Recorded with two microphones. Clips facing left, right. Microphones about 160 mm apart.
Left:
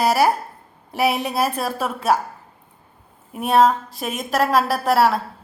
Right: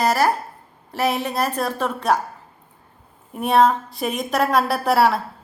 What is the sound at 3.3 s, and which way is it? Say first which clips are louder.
A woman's voice: even; centre (ahead or behind).